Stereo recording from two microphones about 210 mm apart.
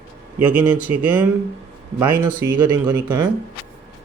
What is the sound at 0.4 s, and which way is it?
Speech, 10° right (ahead or behind).